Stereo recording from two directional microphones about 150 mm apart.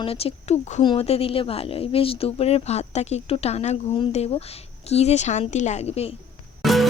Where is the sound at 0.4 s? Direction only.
35° left (ahead or behind).